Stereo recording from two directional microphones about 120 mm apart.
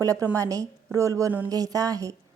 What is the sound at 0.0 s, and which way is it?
A woman's voice, 25° right (ahead or behind).